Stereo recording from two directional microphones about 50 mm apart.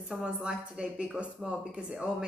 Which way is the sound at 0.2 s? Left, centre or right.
Centre.